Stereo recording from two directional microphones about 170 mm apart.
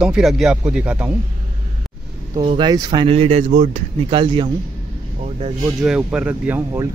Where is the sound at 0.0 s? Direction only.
5° right (ahead or behind).